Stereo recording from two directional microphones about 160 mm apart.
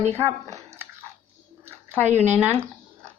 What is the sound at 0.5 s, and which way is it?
Dog, 15° right (ahead or behind).